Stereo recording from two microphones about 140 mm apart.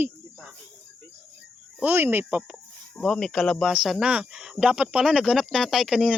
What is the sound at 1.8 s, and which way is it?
Speech, 15° right (ahead or behind).